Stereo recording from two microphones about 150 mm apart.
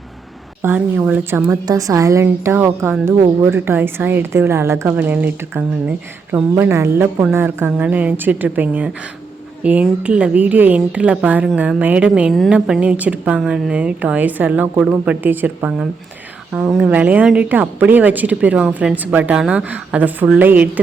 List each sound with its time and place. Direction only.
0.6 s speech: 15° right (ahead or behind)